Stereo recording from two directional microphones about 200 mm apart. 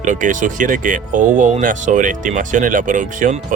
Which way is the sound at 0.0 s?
40° right (ahead or behind).